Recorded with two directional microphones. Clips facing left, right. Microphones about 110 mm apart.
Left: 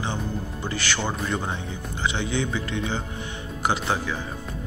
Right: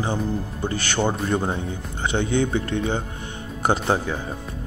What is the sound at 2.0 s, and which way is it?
Speech, 55° right (ahead or behind).